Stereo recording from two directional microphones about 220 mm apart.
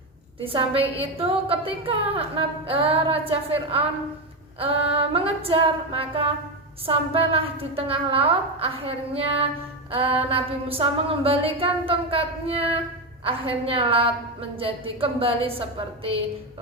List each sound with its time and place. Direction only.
0.3 s a woman's voice: 25° right (ahead or behind)